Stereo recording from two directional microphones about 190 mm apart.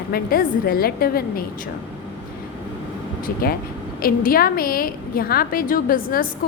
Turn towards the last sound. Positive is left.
turn(degrees=45)  # may be behind; listen again after turning